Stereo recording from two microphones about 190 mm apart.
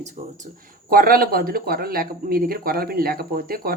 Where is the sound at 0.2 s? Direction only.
30° right (ahead or behind).